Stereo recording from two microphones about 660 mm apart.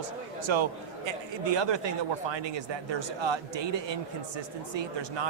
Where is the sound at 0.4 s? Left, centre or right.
Right.